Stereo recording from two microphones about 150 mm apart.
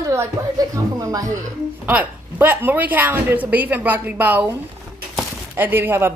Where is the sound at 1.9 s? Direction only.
10° right (ahead or behind).